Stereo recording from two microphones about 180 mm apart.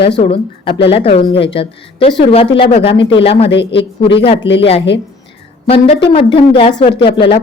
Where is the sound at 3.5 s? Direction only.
75° left (ahead or behind).